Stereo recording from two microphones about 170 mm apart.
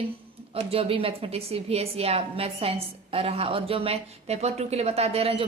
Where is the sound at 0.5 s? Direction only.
35° right (ahead or behind).